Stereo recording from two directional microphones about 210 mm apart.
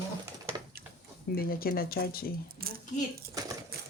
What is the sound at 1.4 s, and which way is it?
Speech, 45° left (ahead or behind).